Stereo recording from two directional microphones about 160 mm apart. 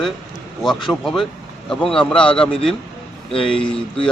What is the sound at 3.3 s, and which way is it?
Speech, 35° left (ahead or behind).